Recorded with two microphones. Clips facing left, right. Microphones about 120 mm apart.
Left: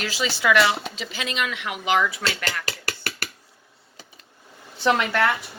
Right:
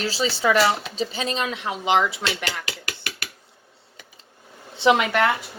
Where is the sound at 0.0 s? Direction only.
35° right (ahead or behind).